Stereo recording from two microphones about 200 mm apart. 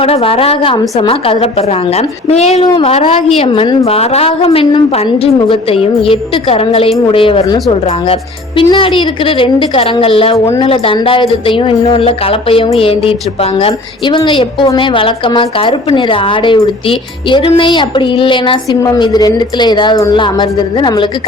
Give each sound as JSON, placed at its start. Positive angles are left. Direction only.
{"t": 0.0, "sound": "speech", "side_deg": 30}
{"t": 10.3, "sound": "a woman's voice", "side_deg": 15}
{"t": 10.7, "sound": "speech", "side_deg": 25}